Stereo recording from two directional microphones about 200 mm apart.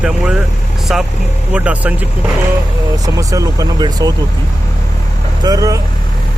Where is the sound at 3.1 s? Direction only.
15° right (ahead or behind).